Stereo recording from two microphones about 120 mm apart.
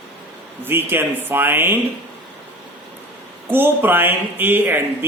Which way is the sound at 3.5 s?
15° right (ahead or behind).